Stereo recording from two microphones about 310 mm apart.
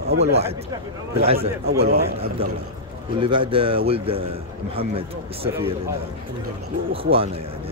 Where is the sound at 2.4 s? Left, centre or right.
Centre.